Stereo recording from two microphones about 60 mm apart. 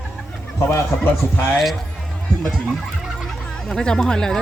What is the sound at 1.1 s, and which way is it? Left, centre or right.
Speech, left.